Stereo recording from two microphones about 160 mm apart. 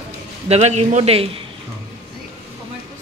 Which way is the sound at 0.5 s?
40° right (ahead or behind).